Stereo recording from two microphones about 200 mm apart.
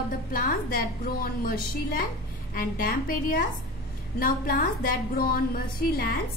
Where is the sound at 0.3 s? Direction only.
40° left (ahead or behind).